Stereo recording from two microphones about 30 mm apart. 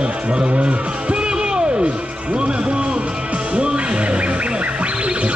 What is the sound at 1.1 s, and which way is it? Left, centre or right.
Music, right.